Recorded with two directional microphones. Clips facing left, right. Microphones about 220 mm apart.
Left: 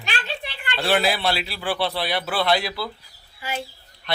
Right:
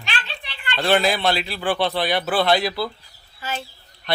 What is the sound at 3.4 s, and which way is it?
Speech, 10° left (ahead or behind).